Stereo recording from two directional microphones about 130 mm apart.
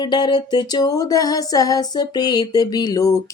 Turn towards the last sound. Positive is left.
turn(degrees=25)  # may be behind; listen again after turning